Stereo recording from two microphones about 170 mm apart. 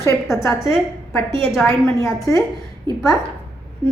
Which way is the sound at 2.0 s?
20° left (ahead or behind).